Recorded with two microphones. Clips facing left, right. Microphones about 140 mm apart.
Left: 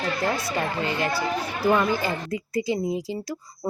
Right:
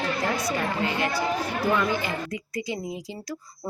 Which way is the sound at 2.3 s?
30° left (ahead or behind).